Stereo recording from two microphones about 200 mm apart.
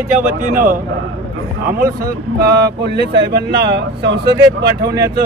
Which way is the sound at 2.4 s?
55° right (ahead or behind).